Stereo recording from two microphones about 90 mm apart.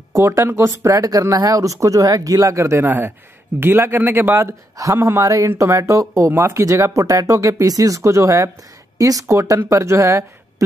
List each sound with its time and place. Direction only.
0.1 s a man's voice: 30° right (ahead or behind)